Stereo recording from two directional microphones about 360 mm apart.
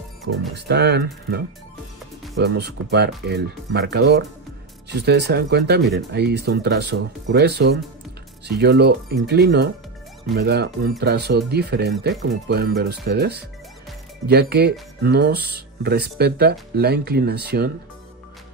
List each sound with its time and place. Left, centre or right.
0.6 s speech: right